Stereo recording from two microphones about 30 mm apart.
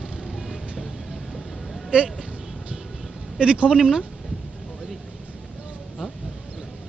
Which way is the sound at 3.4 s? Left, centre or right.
Right.